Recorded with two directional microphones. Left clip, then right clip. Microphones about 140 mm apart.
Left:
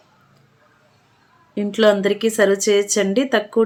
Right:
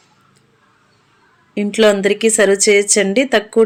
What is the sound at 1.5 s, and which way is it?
Speech, 20° right (ahead or behind).